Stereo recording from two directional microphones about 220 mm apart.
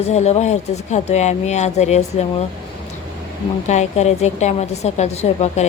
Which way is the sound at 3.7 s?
30° left (ahead or behind).